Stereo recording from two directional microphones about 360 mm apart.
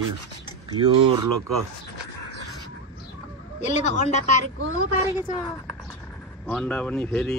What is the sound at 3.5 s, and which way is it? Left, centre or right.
Speech, centre.